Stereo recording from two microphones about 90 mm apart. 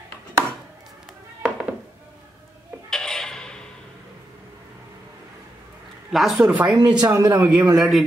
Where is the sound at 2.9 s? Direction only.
5° left (ahead or behind).